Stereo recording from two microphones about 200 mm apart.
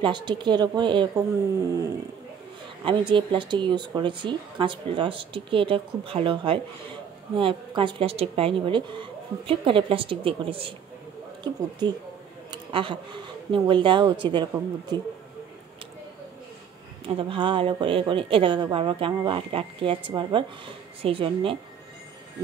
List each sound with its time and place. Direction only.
0.0 s a woman's voice: 20° right (ahead or behind)
2.8 s a woman's voice: 25° right (ahead or behind)
11.8 s a woman's voice: 20° right (ahead or behind)
12.4 s a sound: 25° right (ahead or behind)
13.5 s a woman's voice: 25° right (ahead or behind)
17.1 s a woman's voice: 25° right (ahead or behind)